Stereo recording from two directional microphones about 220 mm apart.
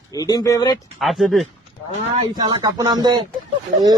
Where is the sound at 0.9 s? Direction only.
Centre (ahead or behind).